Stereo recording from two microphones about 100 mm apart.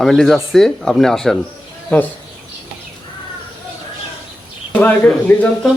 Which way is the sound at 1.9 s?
15° left (ahead or behind).